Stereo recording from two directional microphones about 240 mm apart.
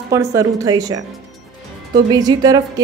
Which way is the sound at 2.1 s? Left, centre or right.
Centre.